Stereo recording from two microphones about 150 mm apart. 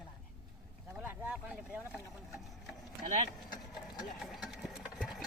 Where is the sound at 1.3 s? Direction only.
5° right (ahead or behind).